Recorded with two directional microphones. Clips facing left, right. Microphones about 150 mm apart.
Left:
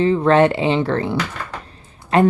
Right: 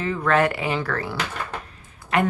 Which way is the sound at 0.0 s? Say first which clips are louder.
Left 7 dB; 30° left (ahead or behind).